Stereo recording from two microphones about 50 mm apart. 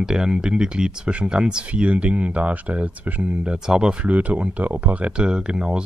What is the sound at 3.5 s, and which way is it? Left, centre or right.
Speech, centre.